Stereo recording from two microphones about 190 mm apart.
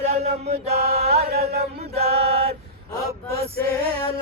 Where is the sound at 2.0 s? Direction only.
30° right (ahead or behind).